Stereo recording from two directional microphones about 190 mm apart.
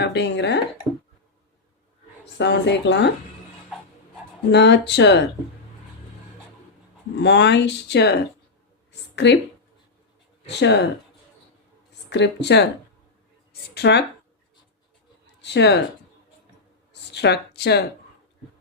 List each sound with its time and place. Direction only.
0.0 s speech: 65° left (ahead or behind)
2.4 s a woman's voice: 65° left (ahead or behind)
4.5 s speech: 65° left (ahead or behind)
7.2 s speech: 65° left (ahead or behind)
8.9 s a sound: 65° left (ahead or behind)
10.5 s speech: 65° left (ahead or behind)
12.0 s speech: 65° left (ahead or behind)
13.7 s speech: 60° left (ahead or behind)
15.4 s speech: 65° left (ahead or behind)
16.9 s a sound: 60° left (ahead or behind)